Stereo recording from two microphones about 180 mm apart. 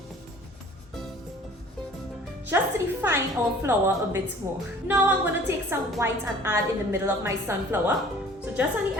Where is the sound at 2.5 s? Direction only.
10° right (ahead or behind).